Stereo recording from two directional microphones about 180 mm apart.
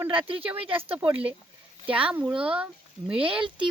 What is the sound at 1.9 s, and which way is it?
Speech, 30° right (ahead or behind).